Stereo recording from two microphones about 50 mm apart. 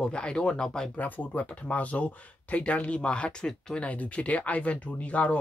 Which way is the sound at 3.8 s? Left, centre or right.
Left.